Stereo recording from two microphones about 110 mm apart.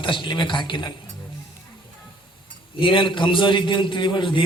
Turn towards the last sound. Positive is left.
turn(degrees=45)  # may be behind; listen again after turning